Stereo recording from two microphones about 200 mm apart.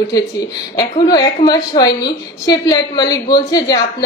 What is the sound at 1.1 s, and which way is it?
A woman's voice, 20° left (ahead or behind).